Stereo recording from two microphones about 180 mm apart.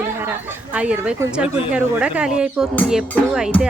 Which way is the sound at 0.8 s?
5° right (ahead or behind).